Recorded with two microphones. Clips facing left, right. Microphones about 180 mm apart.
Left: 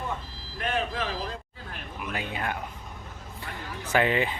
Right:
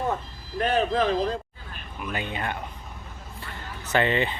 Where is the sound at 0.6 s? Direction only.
35° right (ahead or behind).